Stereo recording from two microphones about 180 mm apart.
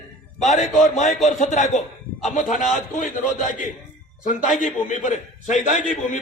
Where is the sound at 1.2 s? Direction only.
45° left (ahead or behind).